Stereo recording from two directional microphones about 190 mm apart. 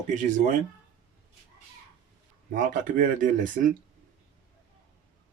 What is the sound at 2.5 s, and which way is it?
Speech, 45° right (ahead or behind).